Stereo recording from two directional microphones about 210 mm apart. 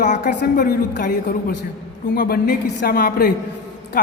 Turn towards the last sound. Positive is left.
turn(degrees=45)  # may be behind; listen again after turning